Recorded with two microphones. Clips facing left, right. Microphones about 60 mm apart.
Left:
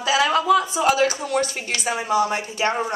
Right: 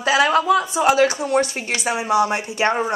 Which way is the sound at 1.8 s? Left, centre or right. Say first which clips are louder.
Right 2 dB; right.